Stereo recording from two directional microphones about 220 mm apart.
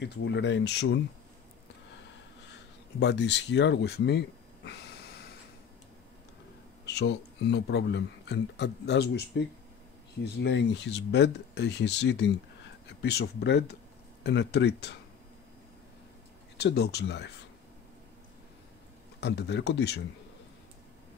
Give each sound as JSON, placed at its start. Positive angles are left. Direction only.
{"t": 0.0, "sound": "speech", "side_deg": 50}
{"t": 3.0, "sound": "speech", "side_deg": 50}
{"t": 6.9, "sound": "speech", "side_deg": 50}
{"t": 10.2, "sound": "speech", "side_deg": 50}
{"t": 16.5, "sound": "speech", "side_deg": 45}
{"t": 19.1, "sound": "speech", "side_deg": 50}